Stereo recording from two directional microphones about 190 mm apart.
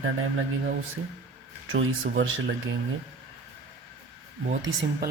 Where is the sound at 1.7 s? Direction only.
85° right.